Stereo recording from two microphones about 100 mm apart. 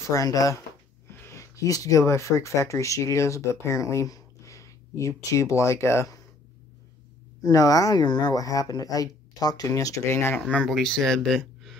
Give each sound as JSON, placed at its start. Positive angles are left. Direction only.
{"t": 0.1, "sound": "speech", "side_deg": 35}
{"t": 7.4, "sound": "speech", "side_deg": 35}
{"t": 10.5, "sound": "speech", "side_deg": 5}